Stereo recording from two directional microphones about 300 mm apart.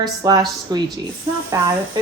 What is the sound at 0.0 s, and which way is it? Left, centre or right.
Speech, centre.